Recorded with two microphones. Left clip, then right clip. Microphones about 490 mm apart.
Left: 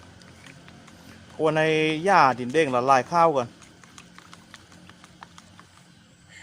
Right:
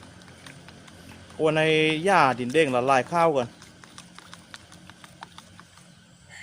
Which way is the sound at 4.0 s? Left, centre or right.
Left.